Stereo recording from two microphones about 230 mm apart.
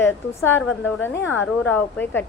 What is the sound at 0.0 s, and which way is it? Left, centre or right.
A woman's voice, centre.